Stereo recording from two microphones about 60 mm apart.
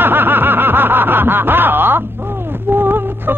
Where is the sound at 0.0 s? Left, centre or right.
Right.